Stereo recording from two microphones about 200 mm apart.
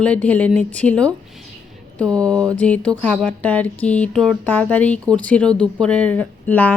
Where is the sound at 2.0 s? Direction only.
20° right (ahead or behind).